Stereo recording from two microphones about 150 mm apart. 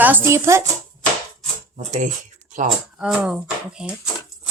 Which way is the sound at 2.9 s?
5° right (ahead or behind).